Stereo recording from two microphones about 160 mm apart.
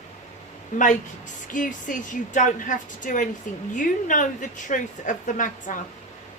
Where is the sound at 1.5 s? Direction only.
55° left (ahead or behind).